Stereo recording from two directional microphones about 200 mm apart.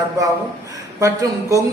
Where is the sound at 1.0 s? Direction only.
15° right (ahead or behind).